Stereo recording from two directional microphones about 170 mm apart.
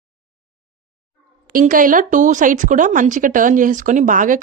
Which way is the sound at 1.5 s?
55° right (ahead or behind).